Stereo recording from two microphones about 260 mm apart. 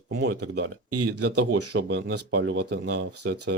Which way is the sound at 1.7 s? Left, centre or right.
Right.